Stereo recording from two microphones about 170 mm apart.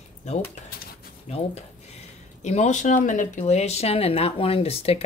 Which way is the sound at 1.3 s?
40° left (ahead or behind).